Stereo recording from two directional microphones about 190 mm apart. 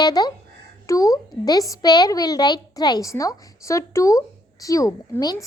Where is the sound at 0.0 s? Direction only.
20° left (ahead or behind).